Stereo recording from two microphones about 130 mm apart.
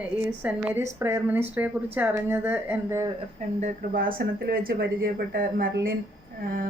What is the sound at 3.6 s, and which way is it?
Speech, 90° right.